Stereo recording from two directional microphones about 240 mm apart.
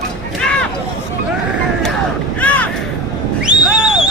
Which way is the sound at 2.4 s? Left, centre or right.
Centre.